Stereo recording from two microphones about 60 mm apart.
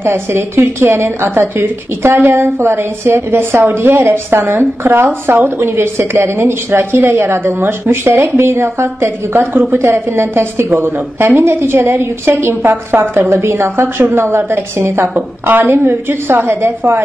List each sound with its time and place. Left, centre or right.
0.0 s a woman's voice: right
15.1 s a woman's voice: right